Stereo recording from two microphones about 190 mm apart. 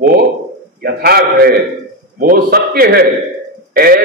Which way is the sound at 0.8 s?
55° right (ahead or behind).